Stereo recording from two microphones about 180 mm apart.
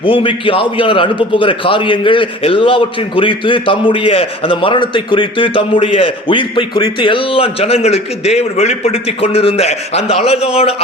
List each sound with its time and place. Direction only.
0.0 s a man's voice: 30° left (ahead or behind)